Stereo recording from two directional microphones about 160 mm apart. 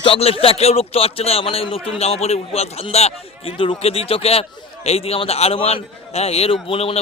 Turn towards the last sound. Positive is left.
turn(degrees=35)  # may be behind; listen again after turning